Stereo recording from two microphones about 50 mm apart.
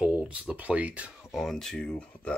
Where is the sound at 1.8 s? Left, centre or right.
Left.